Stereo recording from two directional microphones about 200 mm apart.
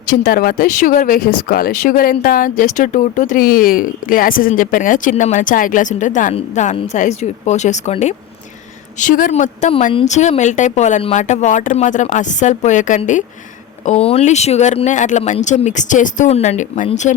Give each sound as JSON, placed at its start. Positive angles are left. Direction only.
{"t": 0.1, "sound": "speech", "side_deg": 45}